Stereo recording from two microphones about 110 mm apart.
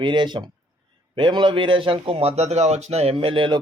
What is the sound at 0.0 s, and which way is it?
A man's voice, 45° right (ahead or behind).